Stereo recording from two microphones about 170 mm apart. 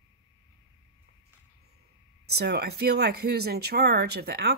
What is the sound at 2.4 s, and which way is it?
Speech, 70° right (ahead or behind).